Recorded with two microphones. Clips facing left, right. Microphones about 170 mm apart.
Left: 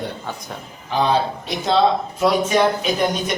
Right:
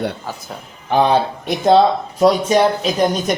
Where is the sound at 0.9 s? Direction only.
55° right (ahead or behind).